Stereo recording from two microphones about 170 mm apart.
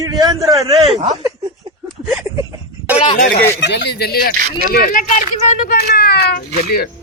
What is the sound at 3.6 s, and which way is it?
Speech, 85° left.